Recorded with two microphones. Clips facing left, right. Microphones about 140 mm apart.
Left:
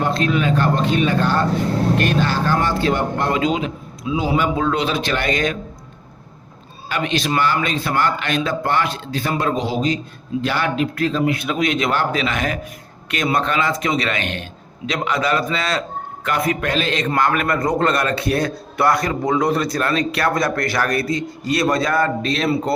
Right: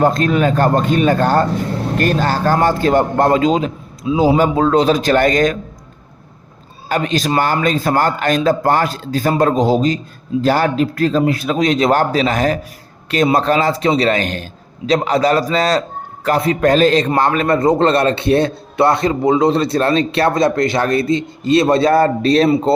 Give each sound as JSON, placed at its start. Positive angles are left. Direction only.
{"t": 0.0, "sound": "a man's voice", "side_deg": -45}
{"t": 6.8, "sound": "a man's voice", "side_deg": -40}
{"t": 16.6, "sound": "a man's voice", "side_deg": -40}
{"t": 17.2, "sound": "a man's voice", "side_deg": -30}